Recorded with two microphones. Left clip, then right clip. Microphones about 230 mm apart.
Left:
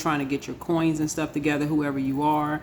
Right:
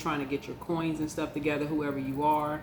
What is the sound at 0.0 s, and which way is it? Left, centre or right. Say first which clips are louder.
Speech: left 6 dB; left.